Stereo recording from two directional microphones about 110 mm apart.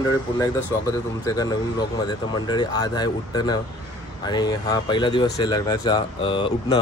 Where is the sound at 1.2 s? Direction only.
35° left (ahead or behind).